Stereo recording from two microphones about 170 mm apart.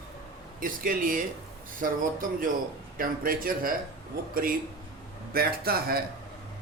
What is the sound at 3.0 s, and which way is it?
Speech, 55° right (ahead or behind).